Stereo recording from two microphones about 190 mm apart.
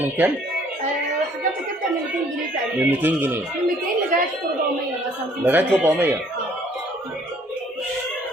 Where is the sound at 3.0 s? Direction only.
10° right (ahead or behind).